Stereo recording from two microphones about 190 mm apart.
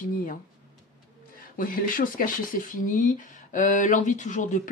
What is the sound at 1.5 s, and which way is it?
Speech, 45° left (ahead or behind).